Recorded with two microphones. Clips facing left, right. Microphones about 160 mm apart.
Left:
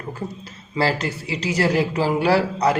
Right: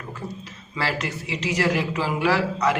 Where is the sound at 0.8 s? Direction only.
35° left (ahead or behind).